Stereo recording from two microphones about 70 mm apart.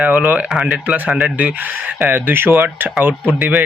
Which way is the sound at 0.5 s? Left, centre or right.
Centre.